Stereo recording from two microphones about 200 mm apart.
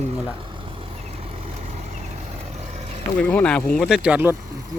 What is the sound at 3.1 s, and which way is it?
A man's voice, 5° left (ahead or behind).